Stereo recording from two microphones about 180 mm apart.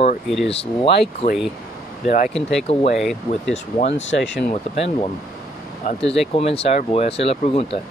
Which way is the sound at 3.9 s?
90° left.